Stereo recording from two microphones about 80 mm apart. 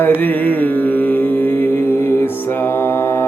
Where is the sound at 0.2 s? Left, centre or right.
Left.